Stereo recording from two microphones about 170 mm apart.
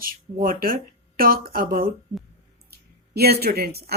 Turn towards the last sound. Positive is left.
turn(degrees=-65)  # may be behind; listen again after turning